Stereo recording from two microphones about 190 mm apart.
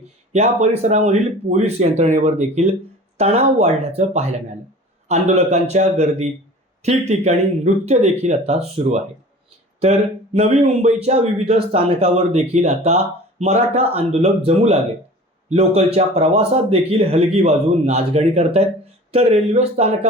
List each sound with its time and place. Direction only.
0.3 s speech: 35° right (ahead or behind)